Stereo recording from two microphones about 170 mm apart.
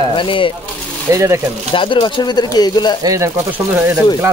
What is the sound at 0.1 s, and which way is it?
Speech, 30° left (ahead or behind).